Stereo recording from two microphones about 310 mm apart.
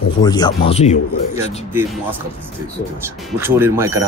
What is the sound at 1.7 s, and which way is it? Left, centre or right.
Speech, centre.